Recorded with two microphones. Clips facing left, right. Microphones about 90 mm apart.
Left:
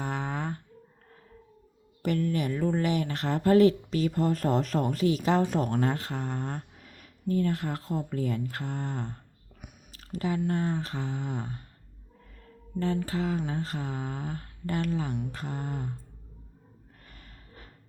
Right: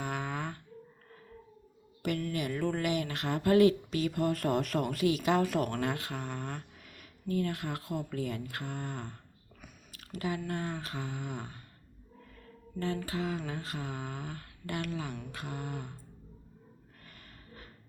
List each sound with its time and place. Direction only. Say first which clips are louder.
0.0 s a sound: left 3 dB; 35° left (ahead or behind)
2.0 s speech: left 5 dB; 35° left (ahead or behind)
12.8 s speech: left 5 dB; 35° left (ahead or behind)
17.1 s gasp: even; 40° left (ahead or behind)